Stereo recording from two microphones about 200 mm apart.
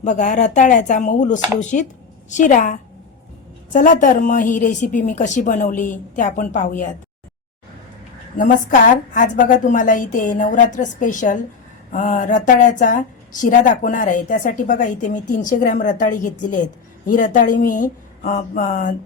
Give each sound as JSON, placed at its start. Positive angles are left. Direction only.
{"t": 0.0, "sound": "a woman's voice", "side_deg": 35}
{"t": 8.4, "sound": "a woman's voice", "side_deg": 40}